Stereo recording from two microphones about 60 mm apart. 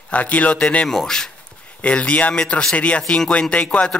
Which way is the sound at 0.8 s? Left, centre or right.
Centre.